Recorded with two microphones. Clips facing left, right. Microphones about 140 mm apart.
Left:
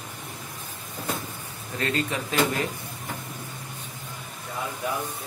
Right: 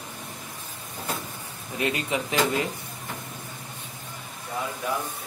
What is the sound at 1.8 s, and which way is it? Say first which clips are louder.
Speech: right 1 dB; 15° right (ahead or behind).